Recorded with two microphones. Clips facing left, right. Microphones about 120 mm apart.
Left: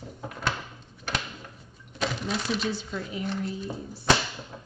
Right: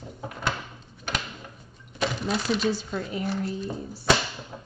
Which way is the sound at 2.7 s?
40° right (ahead or behind).